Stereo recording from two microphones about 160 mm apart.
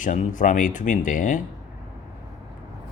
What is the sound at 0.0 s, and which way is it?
Speech, 55° left (ahead or behind).